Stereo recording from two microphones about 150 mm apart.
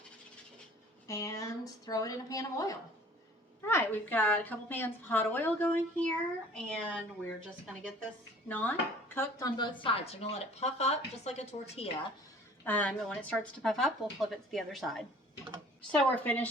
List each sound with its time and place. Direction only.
1.0 s a woman's voice: 20° left (ahead or behind)
8.4 s a woman's voice: 10° left (ahead or behind)
9.6 s a woman's voice: 40° left (ahead or behind)
12.6 s a woman's voice: 10° left (ahead or behind)